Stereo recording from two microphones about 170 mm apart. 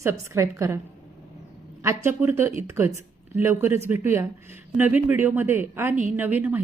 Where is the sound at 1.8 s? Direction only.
15° right (ahead or behind).